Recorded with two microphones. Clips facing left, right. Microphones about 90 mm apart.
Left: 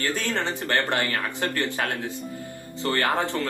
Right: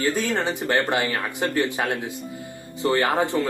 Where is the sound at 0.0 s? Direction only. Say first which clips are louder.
Right 4 dB; 15° right (ahead or behind).